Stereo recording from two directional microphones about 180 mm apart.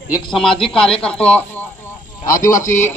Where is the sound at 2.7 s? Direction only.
15° left (ahead or behind).